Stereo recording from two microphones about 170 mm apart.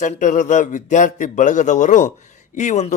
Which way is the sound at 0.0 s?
45° left (ahead or behind).